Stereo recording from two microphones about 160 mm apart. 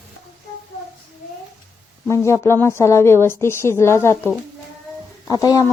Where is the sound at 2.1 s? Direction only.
15° left (ahead or behind).